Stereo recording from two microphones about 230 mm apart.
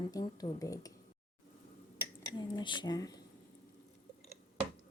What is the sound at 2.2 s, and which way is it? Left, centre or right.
Speech, centre.